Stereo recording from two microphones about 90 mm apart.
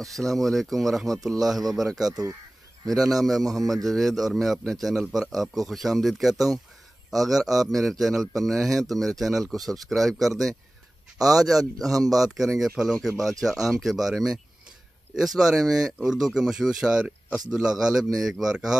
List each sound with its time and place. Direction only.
0.0 s a man's voice: centre (ahead or behind)
2.0 s speech: 45° right (ahead or behind)
3.5 s a man's voice: centre (ahead or behind)
11.9 s speech: 40° right (ahead or behind)
12.2 s a man's voice: centre (ahead or behind)